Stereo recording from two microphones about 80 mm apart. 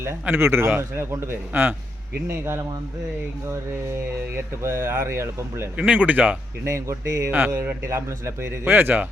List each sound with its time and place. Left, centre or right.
0.3 s a man's voice: right
4.4 s speech: right
5.7 s speech: centre
6.7 s speech: right
7.3 s a man's voice: right
7.9 s a man's voice: right